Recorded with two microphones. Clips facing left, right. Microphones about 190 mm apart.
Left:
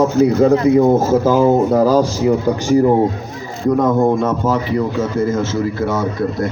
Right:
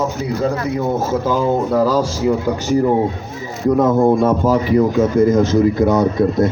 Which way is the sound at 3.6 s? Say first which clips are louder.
Right 1 dB; 5° right (ahead or behind).